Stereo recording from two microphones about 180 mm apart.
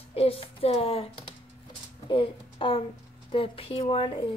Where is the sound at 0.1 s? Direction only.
35° left (ahead or behind).